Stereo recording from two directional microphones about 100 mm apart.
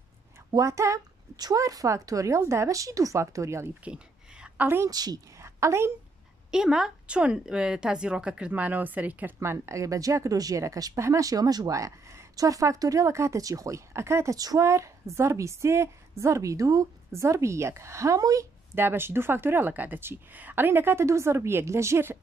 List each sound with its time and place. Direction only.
0.5 s a woman's voice: 35° right (ahead or behind)
3.8 s a sound: 10° right (ahead or behind)
4.8 s a woman's voice: 40° right (ahead or behind)
5.6 s a woman's voice: 30° right (ahead or behind)
6.5 s speech: 5° right (ahead or behind); by 18.5 s 35° right (ahead or behind)
18.8 s speech: 20° right (ahead or behind)